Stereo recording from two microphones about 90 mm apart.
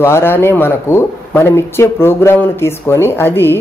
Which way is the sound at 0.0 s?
25° left (ahead or behind).